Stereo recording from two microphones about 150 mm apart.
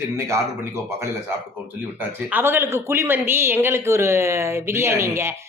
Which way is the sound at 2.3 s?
15° right (ahead or behind).